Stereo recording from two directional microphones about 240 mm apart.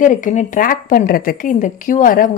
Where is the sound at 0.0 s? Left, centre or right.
Left.